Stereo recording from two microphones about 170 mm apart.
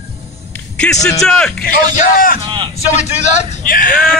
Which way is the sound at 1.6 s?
55° left (ahead or behind).